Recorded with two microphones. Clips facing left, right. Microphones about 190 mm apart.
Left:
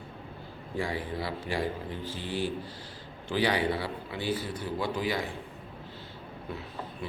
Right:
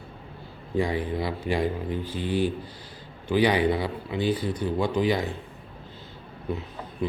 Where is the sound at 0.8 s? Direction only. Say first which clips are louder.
Right 7 dB; 20° right (ahead or behind).